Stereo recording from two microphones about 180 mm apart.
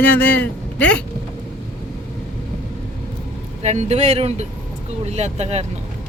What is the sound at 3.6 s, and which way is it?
Speech, 40° right (ahead or behind).